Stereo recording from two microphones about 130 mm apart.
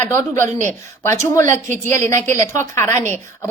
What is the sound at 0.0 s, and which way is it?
A woman's voice, 20° left (ahead or behind).